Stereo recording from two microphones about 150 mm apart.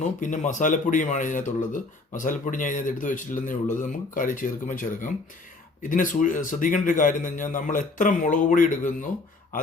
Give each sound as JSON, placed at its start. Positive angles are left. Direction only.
{"t": 0.0, "sound": "speech", "side_deg": 55}